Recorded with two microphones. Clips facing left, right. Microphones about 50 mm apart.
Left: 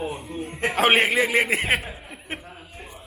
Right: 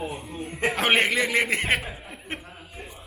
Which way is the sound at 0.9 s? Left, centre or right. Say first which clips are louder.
Left 3 dB; centre.